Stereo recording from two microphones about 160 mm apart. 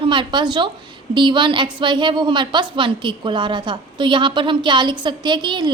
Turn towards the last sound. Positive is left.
turn(degrees=-30)  # may be behind; listen again after turning